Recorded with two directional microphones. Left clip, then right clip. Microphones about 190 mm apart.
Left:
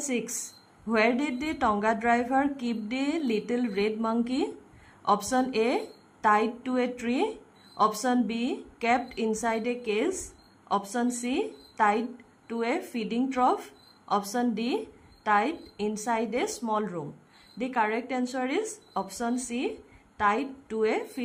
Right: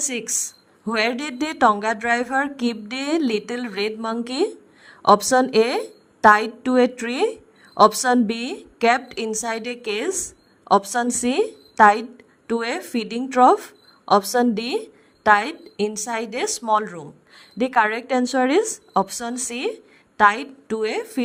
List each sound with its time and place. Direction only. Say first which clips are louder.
0.0 s a woman's voice: right 6 dB; 35° right (ahead or behind)